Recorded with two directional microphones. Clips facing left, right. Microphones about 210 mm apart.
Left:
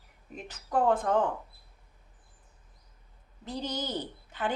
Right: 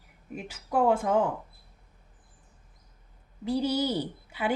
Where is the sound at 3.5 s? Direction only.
10° right (ahead or behind).